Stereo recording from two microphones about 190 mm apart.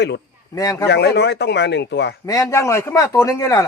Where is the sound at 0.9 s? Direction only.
60° left (ahead or behind).